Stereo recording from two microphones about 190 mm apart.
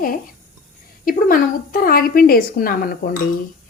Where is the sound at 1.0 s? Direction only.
50° left (ahead or behind).